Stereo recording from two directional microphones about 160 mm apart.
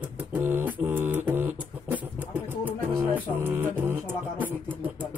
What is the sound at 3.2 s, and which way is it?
Music, 15° right (ahead or behind).